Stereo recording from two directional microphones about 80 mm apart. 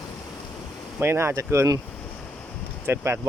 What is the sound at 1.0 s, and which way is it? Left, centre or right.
Speech, right.